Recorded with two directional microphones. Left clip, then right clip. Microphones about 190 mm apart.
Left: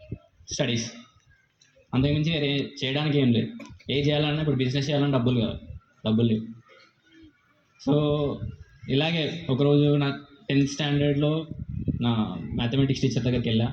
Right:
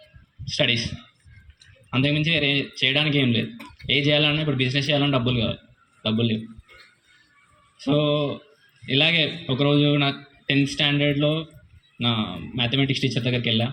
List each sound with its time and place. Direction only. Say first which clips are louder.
0.5 s speech: right 6 dB; 30° left (ahead or behind)
1.9 s a man's voice: right 5 dB; 30° left (ahead or behind)
7.8 s a man's voice: right 3 dB; 30° left (ahead or behind)